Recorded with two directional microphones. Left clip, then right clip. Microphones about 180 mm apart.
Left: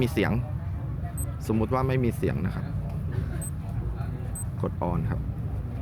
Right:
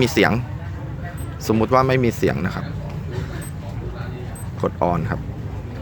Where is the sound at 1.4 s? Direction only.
25° right (ahead or behind).